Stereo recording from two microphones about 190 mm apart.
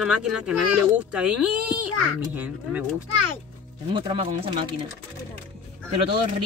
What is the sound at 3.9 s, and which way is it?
Speech, 30° right (ahead or behind).